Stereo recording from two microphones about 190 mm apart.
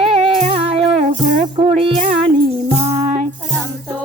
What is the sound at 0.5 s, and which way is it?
Music, 30° right (ahead or behind).